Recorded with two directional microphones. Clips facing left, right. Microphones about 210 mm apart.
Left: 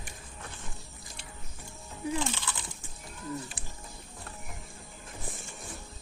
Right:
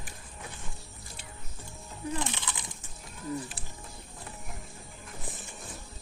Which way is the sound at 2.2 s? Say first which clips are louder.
Left 1 dB; 15° right (ahead or behind).